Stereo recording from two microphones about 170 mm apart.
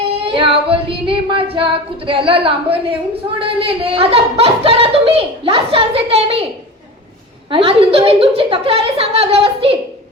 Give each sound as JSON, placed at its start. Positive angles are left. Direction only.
{"t": 0.3, "sound": "female singing", "side_deg": -30}
{"t": 7.5, "sound": "female singing", "side_deg": -35}